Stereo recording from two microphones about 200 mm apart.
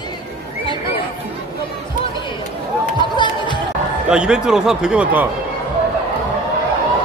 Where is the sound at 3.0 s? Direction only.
25° left (ahead or behind).